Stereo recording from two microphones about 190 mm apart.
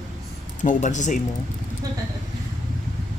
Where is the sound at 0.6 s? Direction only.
40° left (ahead or behind).